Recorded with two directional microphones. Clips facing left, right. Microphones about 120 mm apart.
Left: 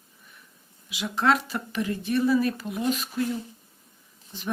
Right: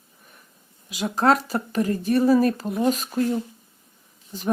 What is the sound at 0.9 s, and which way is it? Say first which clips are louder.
Speech: right 4 dB; 45° right (ahead or behind).